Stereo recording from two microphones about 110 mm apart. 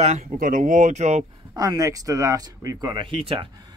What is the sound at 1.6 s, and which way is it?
Speech, 30° right (ahead or behind).